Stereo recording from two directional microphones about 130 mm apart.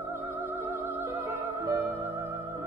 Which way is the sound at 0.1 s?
20° right (ahead or behind).